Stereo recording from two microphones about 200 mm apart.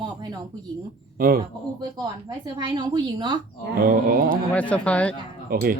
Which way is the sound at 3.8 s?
45° right (ahead or behind).